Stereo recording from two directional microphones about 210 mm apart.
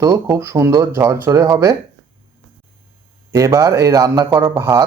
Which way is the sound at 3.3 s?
15° right (ahead or behind).